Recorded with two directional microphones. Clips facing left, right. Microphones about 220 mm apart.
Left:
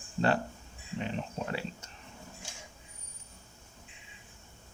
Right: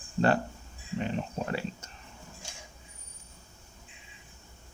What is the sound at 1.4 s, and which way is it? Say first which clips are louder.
Speech: right 2 dB; 45° right (ahead or behind).